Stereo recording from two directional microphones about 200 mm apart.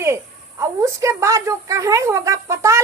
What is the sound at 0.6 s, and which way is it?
A woman's voice, 15° right (ahead or behind).